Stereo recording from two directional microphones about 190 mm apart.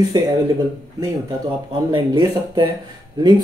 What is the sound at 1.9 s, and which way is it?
Speech, 25° right (ahead or behind).